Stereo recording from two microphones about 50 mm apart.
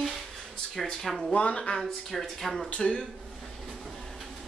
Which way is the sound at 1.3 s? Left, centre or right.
Left.